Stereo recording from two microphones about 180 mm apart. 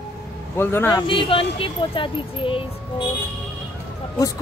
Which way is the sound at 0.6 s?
10° left (ahead or behind).